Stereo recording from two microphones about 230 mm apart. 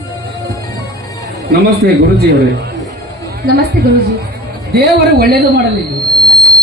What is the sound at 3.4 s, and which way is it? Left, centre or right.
A man's voice, right.